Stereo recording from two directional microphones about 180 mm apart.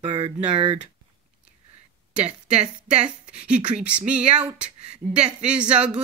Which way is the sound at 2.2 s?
35° right (ahead or behind).